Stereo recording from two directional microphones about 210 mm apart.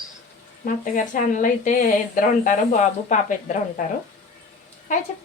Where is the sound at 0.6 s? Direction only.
40° left (ahead or behind).